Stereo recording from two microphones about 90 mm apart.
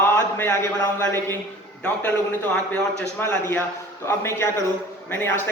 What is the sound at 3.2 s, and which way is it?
A man's voice, 25° left (ahead or behind).